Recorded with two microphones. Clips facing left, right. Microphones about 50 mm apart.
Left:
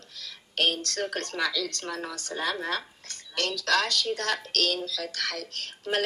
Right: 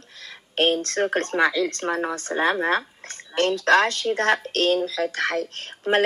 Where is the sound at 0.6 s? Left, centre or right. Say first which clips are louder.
Right 7 dB; right.